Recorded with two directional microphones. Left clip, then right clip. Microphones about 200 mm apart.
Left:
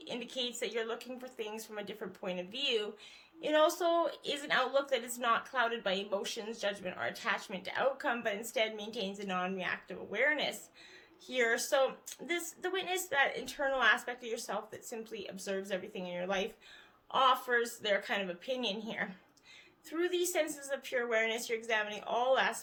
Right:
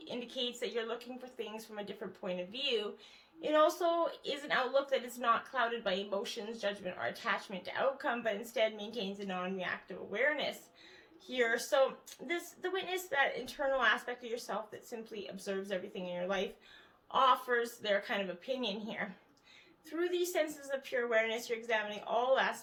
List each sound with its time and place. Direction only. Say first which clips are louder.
0.0 s speech: left 1 dB; 40° left (ahead or behind)